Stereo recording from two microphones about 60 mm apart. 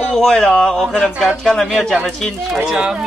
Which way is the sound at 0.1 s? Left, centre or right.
Centre.